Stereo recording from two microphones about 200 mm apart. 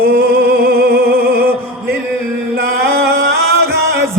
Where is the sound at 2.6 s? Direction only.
50° right (ahead or behind).